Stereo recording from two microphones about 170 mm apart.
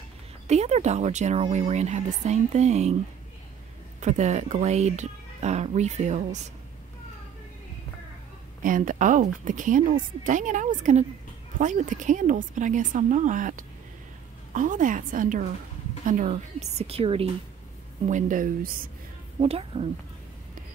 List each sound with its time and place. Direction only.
0.5 s speech: 40° right (ahead or behind)
4.0 s speech: 45° right (ahead or behind)
8.6 s speech: 50° right (ahead or behind); by 17.3 s 35° right (ahead or behind)
18.0 s speech: 50° right (ahead or behind)
19.4 s speech: 35° right (ahead or behind)